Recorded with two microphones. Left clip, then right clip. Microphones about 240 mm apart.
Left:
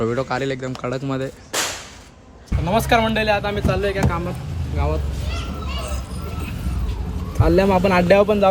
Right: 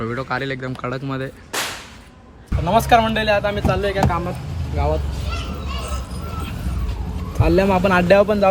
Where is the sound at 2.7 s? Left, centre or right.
Centre.